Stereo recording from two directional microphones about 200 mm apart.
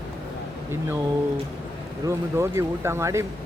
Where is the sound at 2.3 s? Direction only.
15° right (ahead or behind).